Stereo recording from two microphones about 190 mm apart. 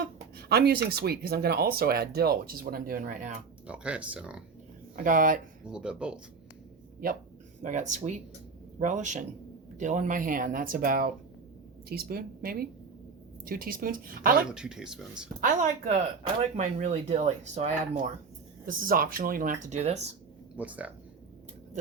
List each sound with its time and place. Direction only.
0.0 s speech: 60° right (ahead or behind); by 3.3 s 40° right (ahead or behind)
3.7 s speech: 5° right (ahead or behind)
4.9 s speech: 45° right (ahead or behind)
5.6 s speech: 5° right (ahead or behind)
7.6 s speech: 40° right (ahead or behind)
14.5 s speech: 5° right (ahead or behind)
15.4 s speech: 45° right (ahead or behind)
18.6 s speech: 45° right (ahead or behind)
20.6 s speech: 10° right (ahead or behind)